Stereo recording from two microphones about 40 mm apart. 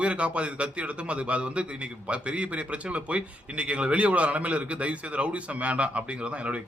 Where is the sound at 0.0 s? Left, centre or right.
Right.